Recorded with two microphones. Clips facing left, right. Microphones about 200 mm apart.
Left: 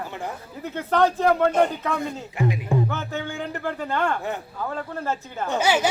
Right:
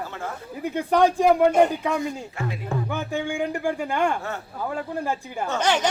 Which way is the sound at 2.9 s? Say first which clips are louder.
Right 3 dB; 15° right (ahead or behind).